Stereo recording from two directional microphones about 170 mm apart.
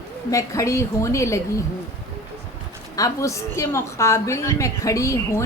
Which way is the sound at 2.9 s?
20° left (ahead or behind).